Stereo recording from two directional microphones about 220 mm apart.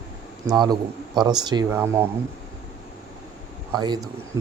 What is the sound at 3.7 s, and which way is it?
Speech, 20° right (ahead or behind).